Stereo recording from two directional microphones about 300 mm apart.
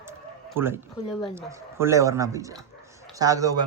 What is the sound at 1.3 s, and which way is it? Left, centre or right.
Speech, centre.